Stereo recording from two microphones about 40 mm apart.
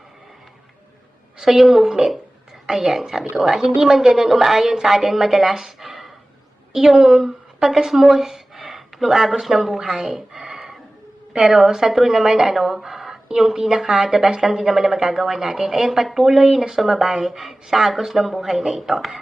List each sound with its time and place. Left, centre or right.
1.4 s a woman's voice: centre